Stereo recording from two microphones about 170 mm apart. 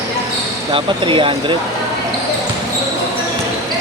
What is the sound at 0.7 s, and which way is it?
Speech, 30° right (ahead or behind).